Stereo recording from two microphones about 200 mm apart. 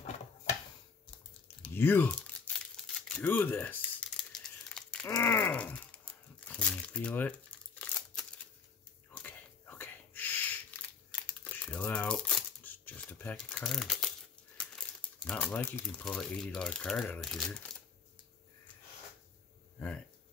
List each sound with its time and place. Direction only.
1.7 s crumpling: 10° left (ahead or behind)
9.1 s a sound: 10° left (ahead or behind)
11.2 s crumpling: 5° left (ahead or behind)
14.6 s speech: 5° left (ahead or behind)